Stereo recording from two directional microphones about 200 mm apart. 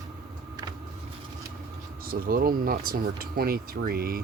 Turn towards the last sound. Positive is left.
turn(degrees=-50)  # may be behind; listen again after turning